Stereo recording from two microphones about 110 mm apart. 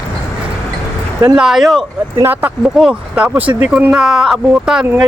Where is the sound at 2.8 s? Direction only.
10° right (ahead or behind).